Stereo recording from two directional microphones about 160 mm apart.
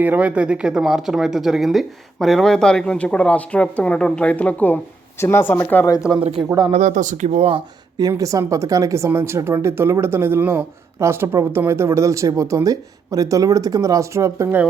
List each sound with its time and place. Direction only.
0.0 s speech: 10° right (ahead or behind); by 6.0 s 20° left (ahead or behind)
6.1 s speech: 35° right (ahead or behind)
6.7 s speech: 50° right (ahead or behind)
7.9 s speech: 20° right (ahead or behind)